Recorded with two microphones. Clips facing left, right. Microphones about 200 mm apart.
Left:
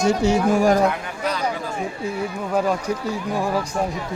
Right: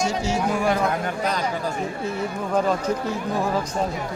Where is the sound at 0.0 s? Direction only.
60° left (ahead or behind).